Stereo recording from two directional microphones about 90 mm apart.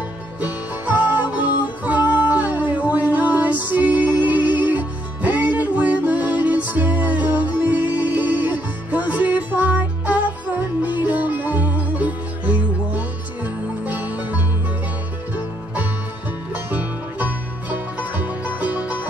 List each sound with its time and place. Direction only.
0.4 s music: 15° right (ahead or behind)
16.5 s music: 15° right (ahead or behind)